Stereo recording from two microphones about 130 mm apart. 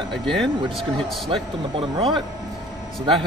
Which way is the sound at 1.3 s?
40° right (ahead or behind).